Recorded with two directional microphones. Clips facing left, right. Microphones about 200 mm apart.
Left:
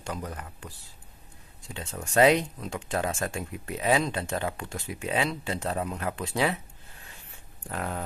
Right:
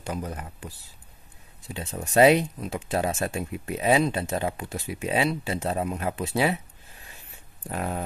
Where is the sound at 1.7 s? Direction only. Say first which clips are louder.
Right 3 dB; 20° right (ahead or behind).